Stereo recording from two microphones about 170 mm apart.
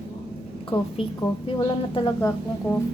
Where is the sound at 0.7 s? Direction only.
35° left (ahead or behind).